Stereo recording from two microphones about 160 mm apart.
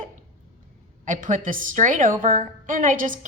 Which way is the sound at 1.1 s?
55° right (ahead or behind).